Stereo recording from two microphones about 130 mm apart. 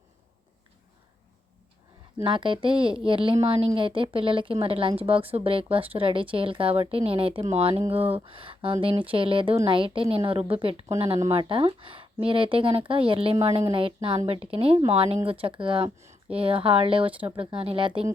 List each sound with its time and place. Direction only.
2.2 s speech: 40° right (ahead or behind)